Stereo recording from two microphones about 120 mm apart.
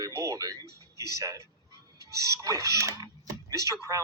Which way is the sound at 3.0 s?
30° right (ahead or behind).